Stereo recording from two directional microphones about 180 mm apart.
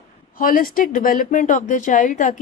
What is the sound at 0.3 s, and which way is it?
A woman's voice, 50° left (ahead or behind).